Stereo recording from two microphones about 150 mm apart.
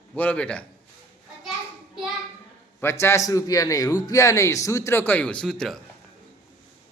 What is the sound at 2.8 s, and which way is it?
A man's voice, 20° left (ahead or behind).